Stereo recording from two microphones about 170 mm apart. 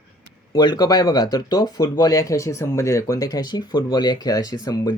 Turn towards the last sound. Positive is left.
turn(degrees=20)  # may be behind; listen again after turning